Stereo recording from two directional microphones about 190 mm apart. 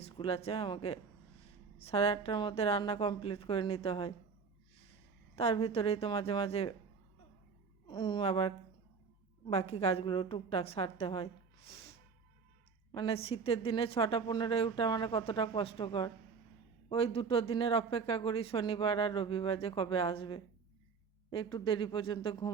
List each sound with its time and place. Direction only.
0.0 s speech: 30° left (ahead or behind)
5.4 s a woman's voice: 30° left (ahead or behind)
7.9 s a woman's voice: 25° left (ahead or behind)
12.9 s speech: 25° left (ahead or behind)